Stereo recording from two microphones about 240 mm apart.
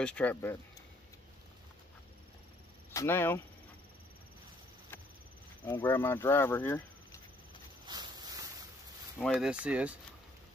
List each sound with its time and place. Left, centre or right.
0.0 s speech: centre
2.9 s speech: centre
5.7 s speech: centre
7.8 s boat: centre
9.2 s speech: centre